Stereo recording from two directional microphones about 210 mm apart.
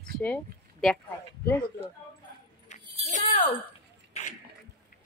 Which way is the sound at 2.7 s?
35° left (ahead or behind).